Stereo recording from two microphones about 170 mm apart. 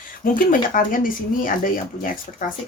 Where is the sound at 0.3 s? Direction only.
50° left (ahead or behind).